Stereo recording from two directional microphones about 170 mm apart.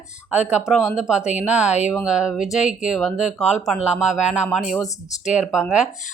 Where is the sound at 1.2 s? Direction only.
45° left (ahead or behind).